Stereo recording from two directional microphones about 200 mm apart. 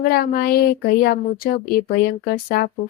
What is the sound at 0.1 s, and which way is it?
Speech, 50° left (ahead or behind).